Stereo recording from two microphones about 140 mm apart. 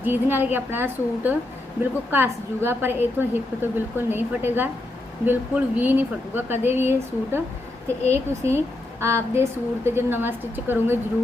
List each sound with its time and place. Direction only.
0.0 s a woman's voice: 15° right (ahead or behind)
8.0 s a woman's voice: 20° right (ahead or behind)